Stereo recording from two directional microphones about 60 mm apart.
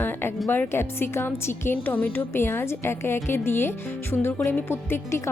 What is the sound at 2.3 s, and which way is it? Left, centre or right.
A woman's voice, left.